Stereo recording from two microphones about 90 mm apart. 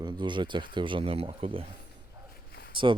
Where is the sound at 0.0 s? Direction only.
60° right (ahead or behind); by 1.6 s 80° right.